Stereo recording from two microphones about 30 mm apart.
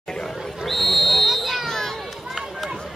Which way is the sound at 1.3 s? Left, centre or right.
Centre.